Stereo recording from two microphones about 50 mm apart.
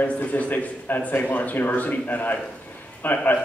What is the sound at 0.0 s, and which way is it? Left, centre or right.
A man's voice, left.